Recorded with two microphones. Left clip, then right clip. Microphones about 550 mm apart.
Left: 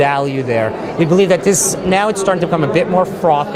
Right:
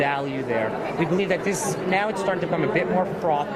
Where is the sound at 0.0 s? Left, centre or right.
Left.